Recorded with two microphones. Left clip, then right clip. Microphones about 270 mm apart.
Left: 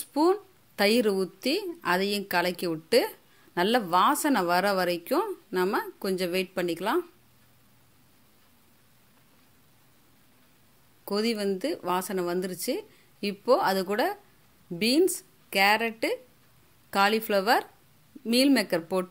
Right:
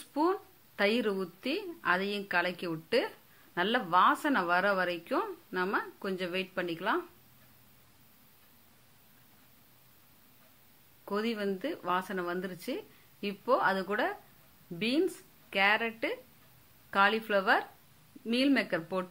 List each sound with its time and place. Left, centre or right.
0.0 s speech: left
11.1 s speech: left